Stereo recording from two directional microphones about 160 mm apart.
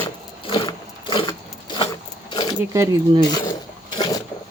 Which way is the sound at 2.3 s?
25° left (ahead or behind).